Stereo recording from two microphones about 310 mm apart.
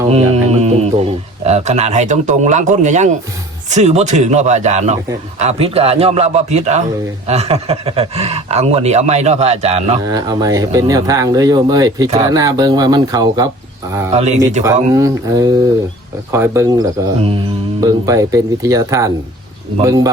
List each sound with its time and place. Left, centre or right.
0.1 s speech: right
14.6 s speech: centre